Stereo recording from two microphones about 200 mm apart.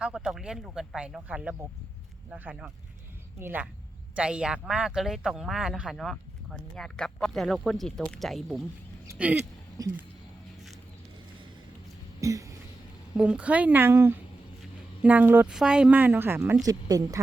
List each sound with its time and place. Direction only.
0.0 s a woman's voice: 5° right (ahead or behind)
12.2 s cough: 15° right (ahead or behind)
13.1 s a woman's voice: 5° right (ahead or behind)